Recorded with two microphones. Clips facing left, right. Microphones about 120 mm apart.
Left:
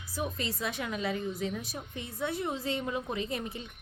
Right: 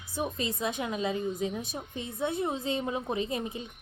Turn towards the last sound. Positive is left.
turn(degrees=-20)  # may be behind; listen again after turning